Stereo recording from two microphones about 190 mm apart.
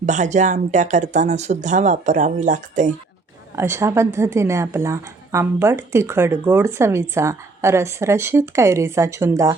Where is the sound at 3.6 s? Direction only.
15° right (ahead or behind).